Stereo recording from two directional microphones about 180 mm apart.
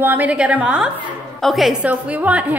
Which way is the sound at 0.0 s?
10° right (ahead or behind).